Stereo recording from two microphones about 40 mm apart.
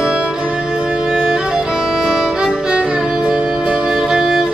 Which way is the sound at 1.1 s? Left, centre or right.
Right.